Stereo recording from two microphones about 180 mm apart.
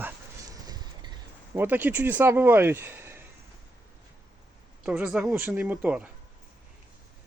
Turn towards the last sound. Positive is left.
turn(degrees=-10)  # may be behind; listen again after turning